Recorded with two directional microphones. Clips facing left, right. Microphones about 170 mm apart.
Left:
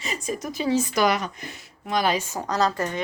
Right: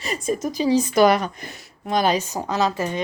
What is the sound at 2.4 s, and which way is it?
Speech, 25° right (ahead or behind).